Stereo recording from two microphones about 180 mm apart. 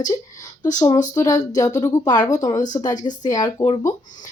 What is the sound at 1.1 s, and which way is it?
Speech, 20° left (ahead or behind).